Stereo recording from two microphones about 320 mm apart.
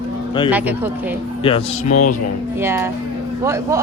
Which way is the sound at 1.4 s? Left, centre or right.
Centre.